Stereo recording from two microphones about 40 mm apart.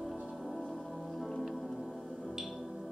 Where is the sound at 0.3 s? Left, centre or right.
Centre.